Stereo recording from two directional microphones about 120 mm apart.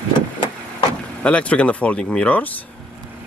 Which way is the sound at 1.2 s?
10° left (ahead or behind).